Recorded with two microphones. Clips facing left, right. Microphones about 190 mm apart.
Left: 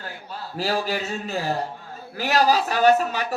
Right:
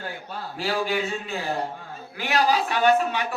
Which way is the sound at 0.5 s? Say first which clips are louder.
Left 1 dB; 40° left (ahead or behind).